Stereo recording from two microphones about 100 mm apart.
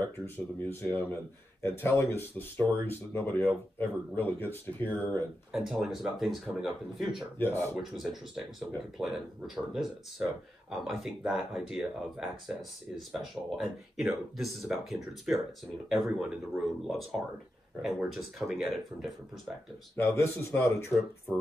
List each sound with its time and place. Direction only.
0.0 s speech: 25° left (ahead or behind)
5.5 s speech: 5° right (ahead or behind)
7.3 s speech: 20° left (ahead or behind)
7.8 s speech: 5° right (ahead or behind)
20.0 s speech: 25° left (ahead or behind)